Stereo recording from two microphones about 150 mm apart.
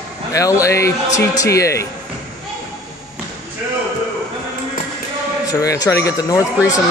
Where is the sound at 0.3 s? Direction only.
20° left (ahead or behind).